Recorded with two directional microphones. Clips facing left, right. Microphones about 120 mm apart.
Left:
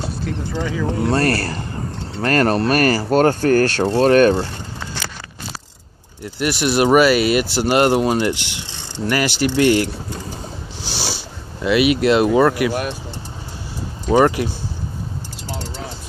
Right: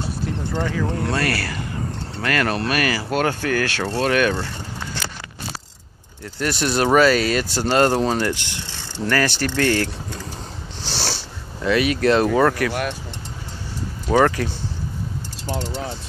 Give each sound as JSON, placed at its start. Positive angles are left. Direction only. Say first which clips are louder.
{"t": 0.6, "sound": "speech", "louder": "left 2 dB", "side_deg": 10}
{"t": 1.1, "sound": "speech", "louder": "left 5 dB", "side_deg": 40}
{"t": 6.2, "sound": "speech", "louder": "left 3 dB", "side_deg": 15}
{"t": 10.8, "sound": "a sound", "louder": "even", "side_deg": 5}
{"t": 11.6, "sound": "speech", "louder": "left 3 dB", "side_deg": 15}
{"t": 14.0, "sound": "speech", "louder": "left 3 dB", "side_deg": 15}
{"t": 15.4, "sound": "keys jangling", "louder": "right 5 dB", "side_deg": -15}